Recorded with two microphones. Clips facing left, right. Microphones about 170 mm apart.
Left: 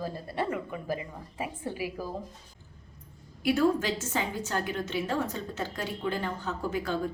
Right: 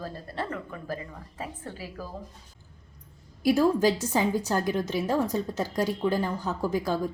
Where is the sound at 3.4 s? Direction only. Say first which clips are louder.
Right 4 dB; 35° right (ahead or behind).